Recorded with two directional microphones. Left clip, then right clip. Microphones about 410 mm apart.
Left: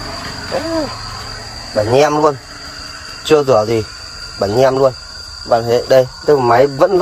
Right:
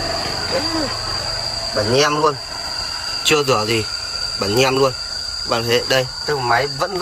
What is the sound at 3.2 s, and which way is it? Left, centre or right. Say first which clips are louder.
Speech: left 5 dB; centre.